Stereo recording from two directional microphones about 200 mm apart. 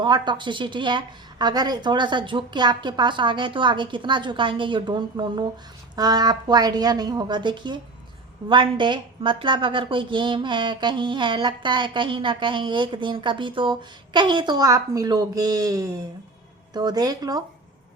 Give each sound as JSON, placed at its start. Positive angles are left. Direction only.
{"t": 0.0, "sound": "a woman's voice", "side_deg": -20}